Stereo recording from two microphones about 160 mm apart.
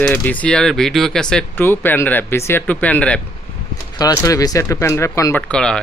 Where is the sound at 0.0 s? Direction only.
10° left (ahead or behind).